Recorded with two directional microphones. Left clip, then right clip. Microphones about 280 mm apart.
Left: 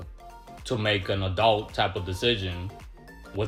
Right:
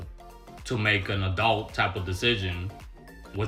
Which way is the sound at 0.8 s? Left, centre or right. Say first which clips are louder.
Right 1 dB; centre.